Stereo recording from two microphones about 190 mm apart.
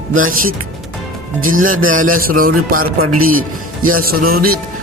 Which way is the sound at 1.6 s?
90° right.